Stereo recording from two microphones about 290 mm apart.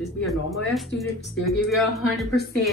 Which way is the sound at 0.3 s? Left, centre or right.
Centre.